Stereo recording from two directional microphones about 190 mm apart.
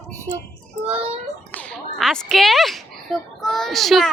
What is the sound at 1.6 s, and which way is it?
A child's voice, 5° left (ahead or behind).